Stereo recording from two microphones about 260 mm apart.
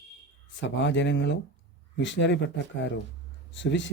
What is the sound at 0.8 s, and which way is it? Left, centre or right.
Speech, left.